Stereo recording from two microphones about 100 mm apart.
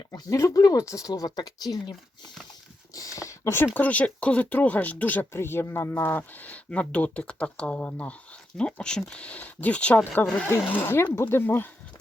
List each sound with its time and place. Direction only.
0.1 s speech: 35° left (ahead or behind)
2.9 s a sound: 35° left (ahead or behind)
3.8 s speech: 15° left (ahead or behind)